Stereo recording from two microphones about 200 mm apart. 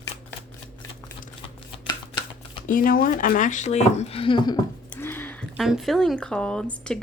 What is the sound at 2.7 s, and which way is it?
Speech, 45° left (ahead or behind).